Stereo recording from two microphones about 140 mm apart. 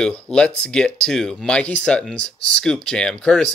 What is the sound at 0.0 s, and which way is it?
Speech, 5° left (ahead or behind).